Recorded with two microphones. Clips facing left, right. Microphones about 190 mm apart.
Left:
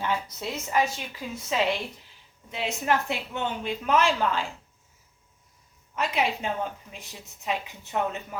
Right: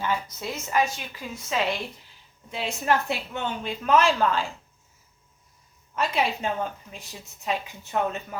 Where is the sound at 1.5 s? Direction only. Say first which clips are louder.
Left 1 dB; 25° left (ahead or behind).